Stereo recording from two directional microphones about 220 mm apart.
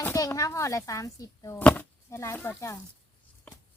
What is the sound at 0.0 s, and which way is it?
Speech, 15° left (ahead or behind).